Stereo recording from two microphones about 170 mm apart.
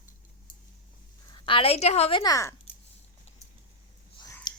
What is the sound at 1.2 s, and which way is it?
Speech, 30° left (ahead or behind).